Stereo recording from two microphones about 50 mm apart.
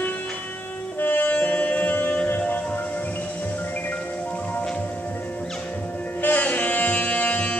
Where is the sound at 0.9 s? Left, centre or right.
Left.